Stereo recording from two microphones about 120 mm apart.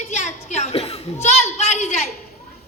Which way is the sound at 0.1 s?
75° left (ahead or behind).